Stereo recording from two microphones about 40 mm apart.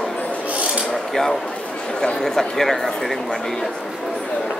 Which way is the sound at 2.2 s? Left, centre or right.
Centre.